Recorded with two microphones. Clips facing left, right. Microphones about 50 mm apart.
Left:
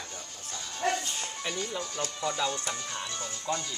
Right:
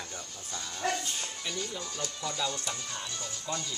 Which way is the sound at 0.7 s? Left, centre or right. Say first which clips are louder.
Left 3 dB; left.